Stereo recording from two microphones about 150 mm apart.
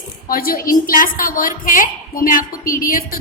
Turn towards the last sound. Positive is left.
turn(degrees=65)  # may be behind; listen again after turning